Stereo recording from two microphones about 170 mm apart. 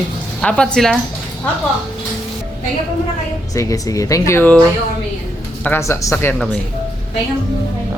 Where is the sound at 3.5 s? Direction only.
20° left (ahead or behind).